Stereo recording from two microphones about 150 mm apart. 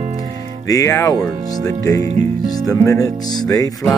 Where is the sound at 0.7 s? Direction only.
20° left (ahead or behind).